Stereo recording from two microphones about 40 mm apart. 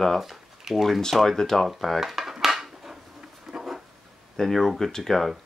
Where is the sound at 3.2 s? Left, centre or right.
Centre.